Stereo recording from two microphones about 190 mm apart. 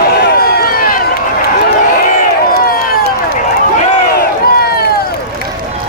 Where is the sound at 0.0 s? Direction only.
55° left (ahead or behind).